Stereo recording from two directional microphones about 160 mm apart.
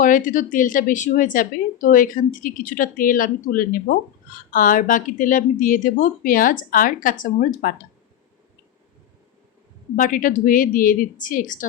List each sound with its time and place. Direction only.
0.0 s a woman's voice: 55° left (ahead or behind)
9.9 s a woman's voice: 55° left (ahead or behind)